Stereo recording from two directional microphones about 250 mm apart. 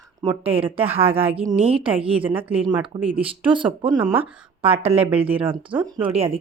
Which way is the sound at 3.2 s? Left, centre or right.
Right.